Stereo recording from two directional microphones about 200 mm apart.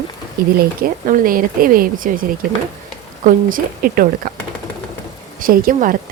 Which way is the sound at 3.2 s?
45° right (ahead or behind).